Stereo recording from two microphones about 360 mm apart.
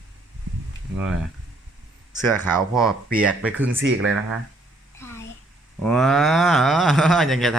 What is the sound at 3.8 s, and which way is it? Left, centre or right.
Speech, right.